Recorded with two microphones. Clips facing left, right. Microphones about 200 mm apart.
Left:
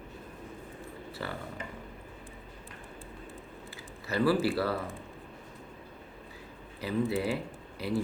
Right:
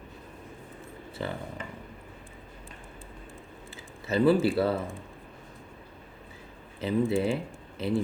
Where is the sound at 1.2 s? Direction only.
20° right (ahead or behind).